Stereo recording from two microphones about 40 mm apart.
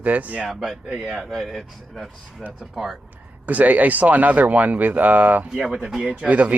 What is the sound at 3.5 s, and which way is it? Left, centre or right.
Speech, right.